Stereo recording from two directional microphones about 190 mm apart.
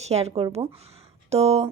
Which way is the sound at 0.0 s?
35° right (ahead or behind).